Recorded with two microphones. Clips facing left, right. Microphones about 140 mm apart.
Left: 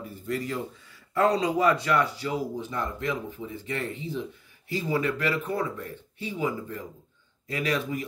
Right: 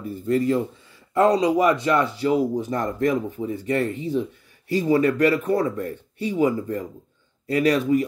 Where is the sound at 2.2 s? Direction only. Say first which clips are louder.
Right 9 dB; 40° right (ahead or behind).